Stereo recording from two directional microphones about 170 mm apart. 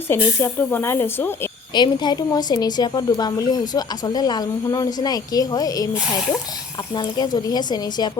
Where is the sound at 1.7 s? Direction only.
25° left (ahead or behind).